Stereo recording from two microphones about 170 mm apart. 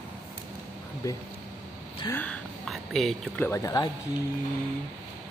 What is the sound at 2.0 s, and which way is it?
Speech, 10° left (ahead or behind).